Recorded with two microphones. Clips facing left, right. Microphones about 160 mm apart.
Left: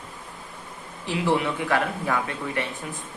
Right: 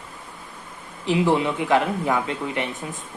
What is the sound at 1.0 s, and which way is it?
Speech, 20° right (ahead or behind).